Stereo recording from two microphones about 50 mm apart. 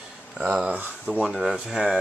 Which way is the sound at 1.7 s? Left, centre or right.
Centre.